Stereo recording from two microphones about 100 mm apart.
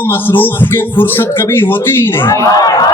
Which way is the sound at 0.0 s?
20° left (ahead or behind).